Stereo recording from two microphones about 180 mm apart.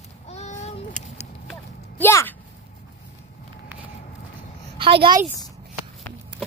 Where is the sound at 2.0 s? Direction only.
10° left (ahead or behind).